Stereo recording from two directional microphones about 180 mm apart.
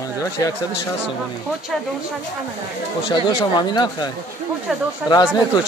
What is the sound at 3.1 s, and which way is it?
Speech, 25° left (ahead or behind).